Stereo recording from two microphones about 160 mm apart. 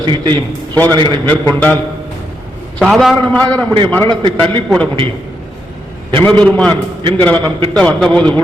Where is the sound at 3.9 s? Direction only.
10° left (ahead or behind).